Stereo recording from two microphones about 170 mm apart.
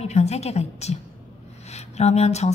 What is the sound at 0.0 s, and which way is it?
A woman's voice, 40° left (ahead or behind).